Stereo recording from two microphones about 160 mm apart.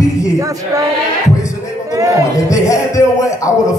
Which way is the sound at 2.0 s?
20° right (ahead or behind).